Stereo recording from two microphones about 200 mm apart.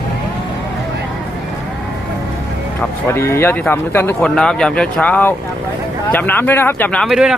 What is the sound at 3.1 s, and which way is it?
Speech, 10° left (ahead or behind).